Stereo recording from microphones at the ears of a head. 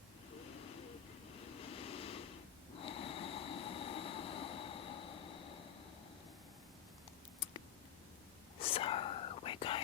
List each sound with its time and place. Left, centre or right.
0.5 s a sound: left
1.4 s snort: left
8.5 s whispering: left